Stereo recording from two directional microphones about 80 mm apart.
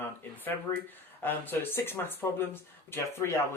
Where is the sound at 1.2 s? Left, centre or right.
Left.